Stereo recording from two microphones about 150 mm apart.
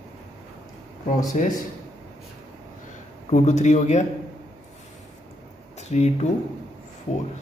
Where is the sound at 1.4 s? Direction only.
55° left (ahead or behind).